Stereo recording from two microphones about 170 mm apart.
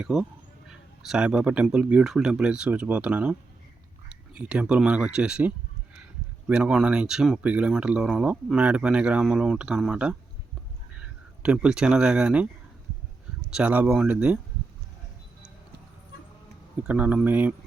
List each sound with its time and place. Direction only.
0.0 s speech: 5° right (ahead or behind)
4.4 s speech: 5° right (ahead or behind)
13.5 s speech: 10° right (ahead or behind)
16.8 s speech: 10° right (ahead or behind)